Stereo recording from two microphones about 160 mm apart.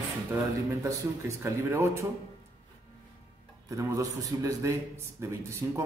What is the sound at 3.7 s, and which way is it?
A man's voice, 20° right (ahead or behind).